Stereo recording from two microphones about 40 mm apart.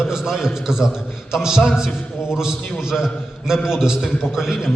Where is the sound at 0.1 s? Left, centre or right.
Centre.